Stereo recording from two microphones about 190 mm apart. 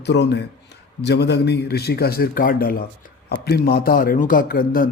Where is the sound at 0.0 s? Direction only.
65° left (ahead or behind).